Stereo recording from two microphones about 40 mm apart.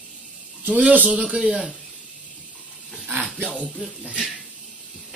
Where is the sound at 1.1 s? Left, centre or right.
Right.